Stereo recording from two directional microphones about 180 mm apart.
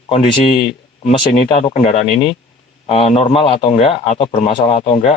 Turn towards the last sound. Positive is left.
turn(degrees=35)  # may be behind; listen again after turning